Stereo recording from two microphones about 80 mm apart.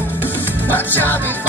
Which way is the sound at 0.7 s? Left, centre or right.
Left.